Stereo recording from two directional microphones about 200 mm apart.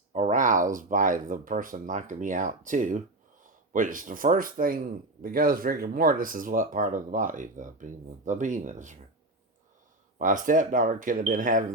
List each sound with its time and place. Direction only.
0.1 s speech: 35° right (ahead or behind)
10.2 s speech: 40° right (ahead or behind)